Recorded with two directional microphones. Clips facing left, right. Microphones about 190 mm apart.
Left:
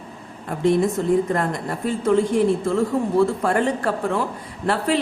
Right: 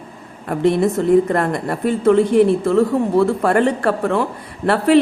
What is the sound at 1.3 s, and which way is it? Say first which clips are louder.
Speech: right 4 dB; 65° right (ahead or behind).